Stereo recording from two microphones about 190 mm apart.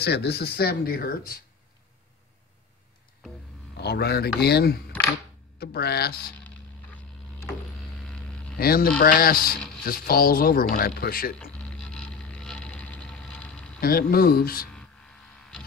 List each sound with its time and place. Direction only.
0.0 s speech: 60° left (ahead or behind)
3.7 s a man's voice: 60° left (ahead or behind)
8.0 s mains hum: 5° left (ahead or behind)
8.5 s speech: 50° left (ahead or behind)
11.5 s a sound: 5° left (ahead or behind)
13.7 s speech: 50° left (ahead or behind)